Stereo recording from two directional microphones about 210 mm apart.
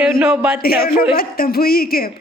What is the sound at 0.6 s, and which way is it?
Speech, 45° left (ahead or behind).